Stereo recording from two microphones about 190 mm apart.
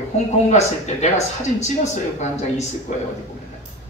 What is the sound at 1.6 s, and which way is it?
A man's voice, 40° left (ahead or behind).